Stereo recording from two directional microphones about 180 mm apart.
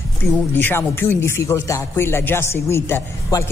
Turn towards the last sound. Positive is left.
turn(degrees=15)  # may be behind; listen again after turning